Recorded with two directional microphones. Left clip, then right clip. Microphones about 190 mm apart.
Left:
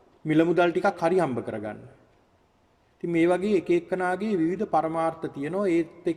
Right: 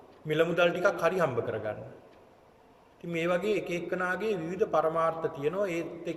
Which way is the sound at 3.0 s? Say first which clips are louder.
Left 6 dB; 40° left (ahead or behind).